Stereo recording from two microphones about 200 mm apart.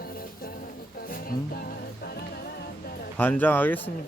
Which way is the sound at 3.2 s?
10° left (ahead or behind).